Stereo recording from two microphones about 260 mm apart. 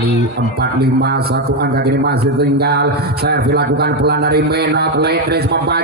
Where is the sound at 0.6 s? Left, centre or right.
Right.